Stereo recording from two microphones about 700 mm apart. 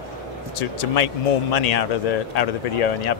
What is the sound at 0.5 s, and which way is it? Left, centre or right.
Speech, left.